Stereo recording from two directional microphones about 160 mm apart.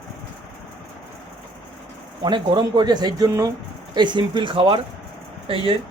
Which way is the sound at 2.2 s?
25° right (ahead or behind).